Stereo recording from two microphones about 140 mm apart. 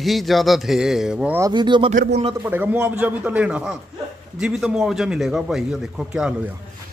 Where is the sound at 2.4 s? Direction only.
15° right (ahead or behind).